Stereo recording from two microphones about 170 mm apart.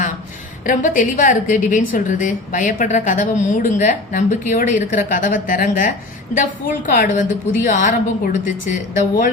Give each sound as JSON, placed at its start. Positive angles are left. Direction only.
{"t": 0.6, "sound": "a woman's voice", "side_deg": 50}